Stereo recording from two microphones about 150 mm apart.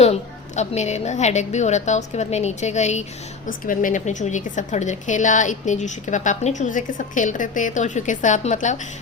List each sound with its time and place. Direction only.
0.0 s a woman's voice: 45° left (ahead or behind)
3.4 s a woman's voice: 60° left (ahead or behind)